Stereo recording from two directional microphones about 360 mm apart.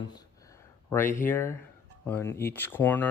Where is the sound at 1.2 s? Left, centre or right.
Centre.